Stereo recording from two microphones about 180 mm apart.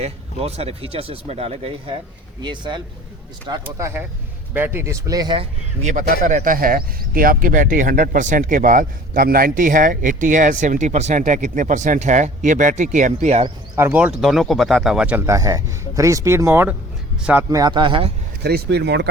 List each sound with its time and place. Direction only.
0.0 s speech: 35° right (ahead or behind)
3.6 s speech: 15° right (ahead or behind)
5.8 s a man's voice: 45° right (ahead or behind)
13.7 s speech: 10° right (ahead or behind)
17.5 s speech: 25° right (ahead or behind)
18.4 s speech: 65° right (ahead or behind)